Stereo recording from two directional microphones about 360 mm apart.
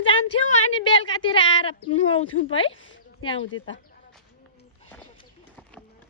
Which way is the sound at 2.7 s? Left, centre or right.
Left.